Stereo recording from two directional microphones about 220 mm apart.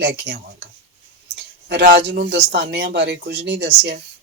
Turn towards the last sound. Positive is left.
turn(degrees=-55)  # may be behind; listen again after turning